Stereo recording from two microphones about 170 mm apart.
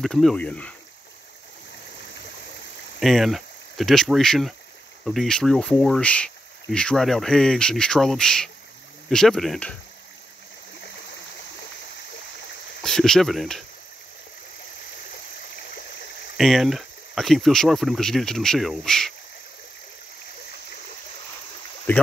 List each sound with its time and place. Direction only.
0.0 s speech: centre (ahead or behind)
3.0 s speech: centre (ahead or behind)
12.8 s speech: 5° left (ahead or behind)
16.3 s speech: centre (ahead or behind)
21.9 s speech: 10° left (ahead or behind)